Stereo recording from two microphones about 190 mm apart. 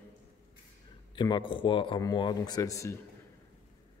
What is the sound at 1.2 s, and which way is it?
Speech, 25° left (ahead or behind).